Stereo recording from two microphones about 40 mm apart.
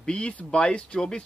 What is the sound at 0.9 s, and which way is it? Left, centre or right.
Speech, centre.